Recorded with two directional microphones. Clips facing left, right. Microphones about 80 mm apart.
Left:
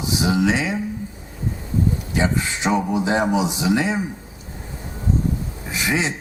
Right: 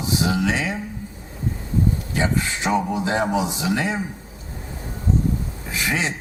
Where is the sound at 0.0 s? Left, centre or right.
Centre.